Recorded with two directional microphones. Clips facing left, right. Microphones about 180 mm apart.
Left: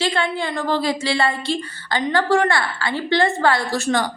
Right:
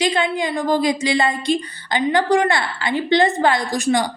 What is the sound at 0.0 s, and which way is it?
A woman's voice, 15° right (ahead or behind).